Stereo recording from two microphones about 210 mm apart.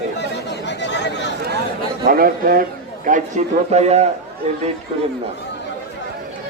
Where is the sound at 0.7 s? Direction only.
55° left (ahead or behind).